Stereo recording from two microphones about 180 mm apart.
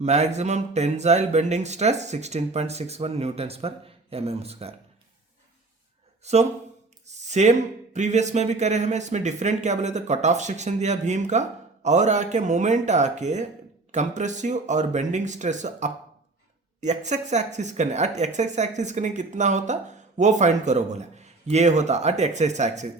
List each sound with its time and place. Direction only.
0.0 s speech: 40° right (ahead or behind)
6.2 s speech: 35° right (ahead or behind)
7.1 s a sound: 40° right (ahead or behind)
7.9 s speech: 40° right (ahead or behind)